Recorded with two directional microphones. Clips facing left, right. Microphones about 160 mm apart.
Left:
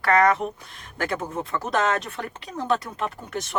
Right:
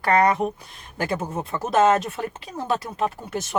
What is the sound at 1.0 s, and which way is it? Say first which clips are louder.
Speech: right 1 dB; 10° right (ahead or behind).